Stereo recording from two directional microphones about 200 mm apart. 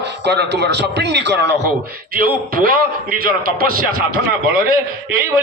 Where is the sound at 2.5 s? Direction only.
45° right (ahead or behind).